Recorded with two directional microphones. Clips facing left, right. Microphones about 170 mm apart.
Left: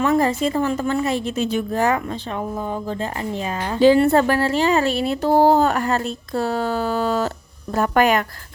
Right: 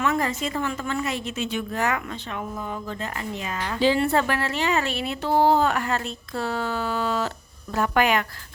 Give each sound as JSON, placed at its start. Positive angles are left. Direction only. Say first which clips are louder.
{"t": 0.0, "sound": "a woman's voice", "louder": "left 7 dB", "side_deg": 35}
{"t": 3.8, "sound": "a woman's voice", "louder": "left 7 dB", "side_deg": 45}